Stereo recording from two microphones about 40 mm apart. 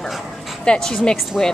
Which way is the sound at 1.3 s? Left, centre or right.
Centre.